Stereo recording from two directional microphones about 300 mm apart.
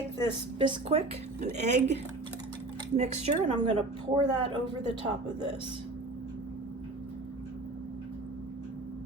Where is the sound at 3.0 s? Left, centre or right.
Right.